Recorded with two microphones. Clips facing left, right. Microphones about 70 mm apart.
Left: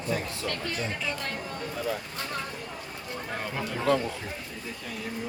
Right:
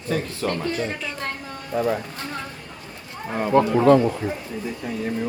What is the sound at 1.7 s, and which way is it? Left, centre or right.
Speech, right.